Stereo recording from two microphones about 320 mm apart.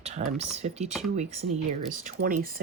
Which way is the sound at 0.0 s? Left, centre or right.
Centre.